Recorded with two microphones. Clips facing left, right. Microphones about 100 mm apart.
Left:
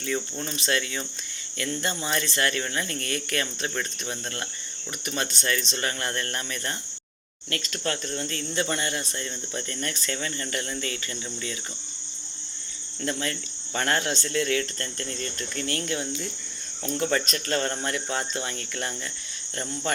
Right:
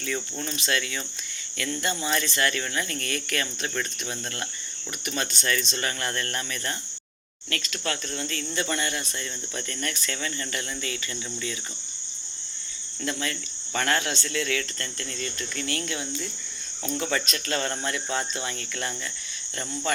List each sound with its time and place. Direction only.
0.0 s speech: 25° left (ahead or behind)
5.0 s speech: 25° left (ahead or behind)
8.1 s speech: 35° left (ahead or behind)
13.1 s speech: 35° left (ahead or behind)